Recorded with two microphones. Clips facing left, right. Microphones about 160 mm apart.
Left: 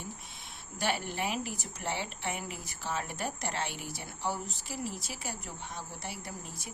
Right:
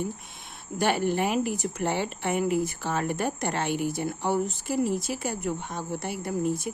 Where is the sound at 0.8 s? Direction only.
50° right (ahead or behind).